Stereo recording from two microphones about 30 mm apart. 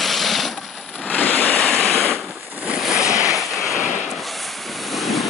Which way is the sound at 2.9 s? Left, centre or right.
Right.